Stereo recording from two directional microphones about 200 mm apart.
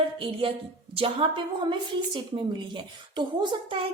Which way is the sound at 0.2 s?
25° right (ahead or behind).